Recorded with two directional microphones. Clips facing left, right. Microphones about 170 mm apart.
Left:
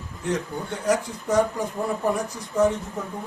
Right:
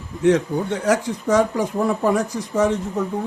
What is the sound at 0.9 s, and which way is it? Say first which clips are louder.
Speech: right 3 dB; 90° right.